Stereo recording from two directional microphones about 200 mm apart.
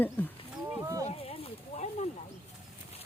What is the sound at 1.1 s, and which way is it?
Snake, 30° left (ahead or behind).